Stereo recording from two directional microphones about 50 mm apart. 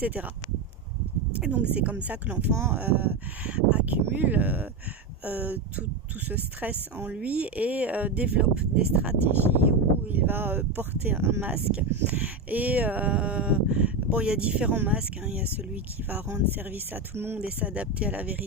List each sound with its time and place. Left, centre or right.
0.0 s speech: right
1.3 s speech: right
2.5 s speech: right
2.7 s speech: right
3.5 s speech: right
4.2 s speech: right
9.5 s speech: right
11.5 s speech: right
14.7 s speech: right
14.9 s speech: right
15.5 s speech: right
17.4 s speech: right